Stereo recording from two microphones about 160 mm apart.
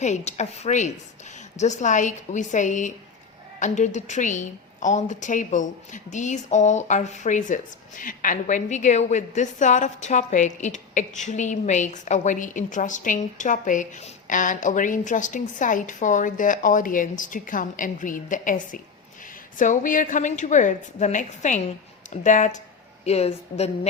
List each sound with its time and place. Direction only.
0.0 s a woman's voice: 45° left (ahead or behind)